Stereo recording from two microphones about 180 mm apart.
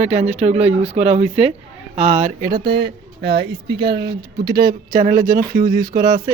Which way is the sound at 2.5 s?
65° right (ahead or behind).